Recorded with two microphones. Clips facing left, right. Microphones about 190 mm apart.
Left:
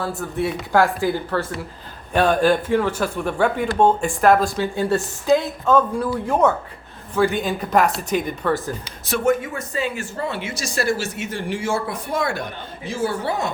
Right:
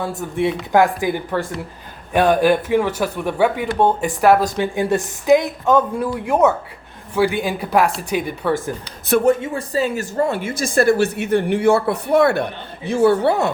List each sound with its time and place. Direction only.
0.2 s speech: 20° right (ahead or behind)
9.2 s speech: 30° right (ahead or behind); by 13.5 s 65° right (ahead or behind)